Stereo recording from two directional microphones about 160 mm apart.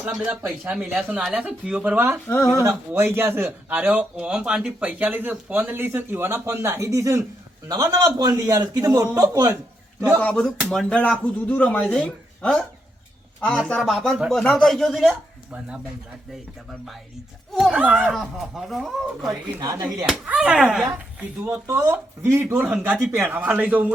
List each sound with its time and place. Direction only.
0.2 s a man's voice: 5° right (ahead or behind)
10.2 s speech: 5° left (ahead or behind)
13.7 s speech: centre (ahead or behind)
17.5 s speech: centre (ahead or behind)
19.5 s a man's voice: 25° right (ahead or behind)
20.1 s speech: 5° right (ahead or behind)
21.4 s a man's voice: 20° right (ahead or behind)